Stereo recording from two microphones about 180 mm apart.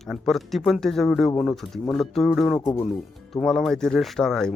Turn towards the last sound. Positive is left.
turn(degrees=5)  # may be behind; listen again after turning